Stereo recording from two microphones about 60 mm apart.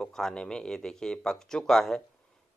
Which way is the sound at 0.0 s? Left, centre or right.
Centre.